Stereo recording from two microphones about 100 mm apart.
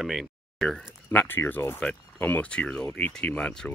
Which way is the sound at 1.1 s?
15° left (ahead or behind).